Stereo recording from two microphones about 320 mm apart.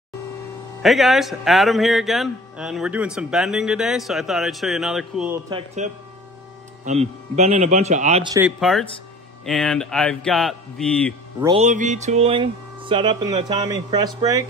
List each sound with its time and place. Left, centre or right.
0.8 s a man's voice: centre
5.8 s a man's voice: right
8.5 s a man's voice: centre
11.4 s speech: centre